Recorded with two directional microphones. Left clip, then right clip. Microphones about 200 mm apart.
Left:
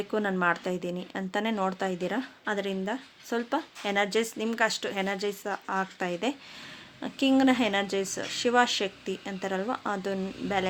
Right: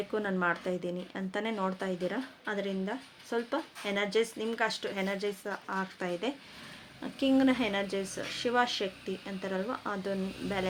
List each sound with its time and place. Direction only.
0.1 s speech: 40° left (ahead or behind)